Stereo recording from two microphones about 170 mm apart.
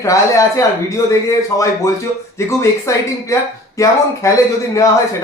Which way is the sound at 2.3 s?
15° left (ahead or behind).